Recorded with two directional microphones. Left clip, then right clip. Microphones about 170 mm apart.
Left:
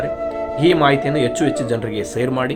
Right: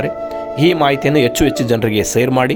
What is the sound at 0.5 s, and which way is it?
Speech, 50° right (ahead or behind).